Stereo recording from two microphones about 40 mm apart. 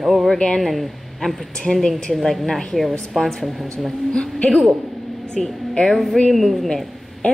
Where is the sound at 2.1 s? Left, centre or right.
Centre.